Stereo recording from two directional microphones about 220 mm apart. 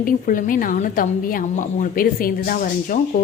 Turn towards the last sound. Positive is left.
turn(degrees=40)  # may be behind; listen again after turning